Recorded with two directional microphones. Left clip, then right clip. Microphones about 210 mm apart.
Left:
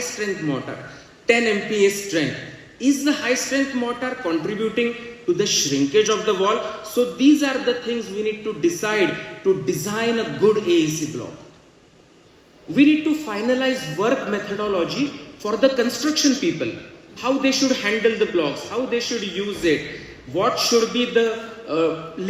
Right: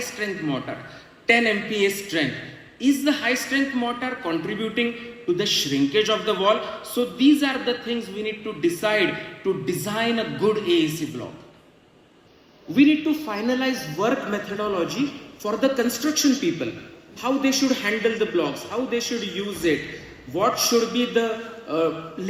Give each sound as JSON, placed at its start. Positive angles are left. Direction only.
{"t": 0.0, "sound": "a man's voice", "side_deg": -20}
{"t": 12.7, "sound": "a man's voice", "side_deg": -25}